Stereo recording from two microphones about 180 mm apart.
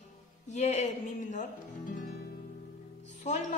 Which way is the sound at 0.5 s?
40° left (ahead or behind).